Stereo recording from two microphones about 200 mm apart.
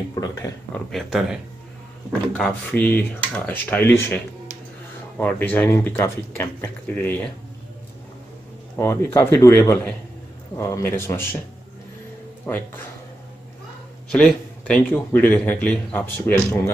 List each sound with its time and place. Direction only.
0.1 s speech: 20° left (ahead or behind)
0.9 s speech: centre (ahead or behind)
8.7 s speech: 10° left (ahead or behind)
12.4 s speech: 10° left (ahead or behind)
14.1 s speech: 5° left (ahead or behind)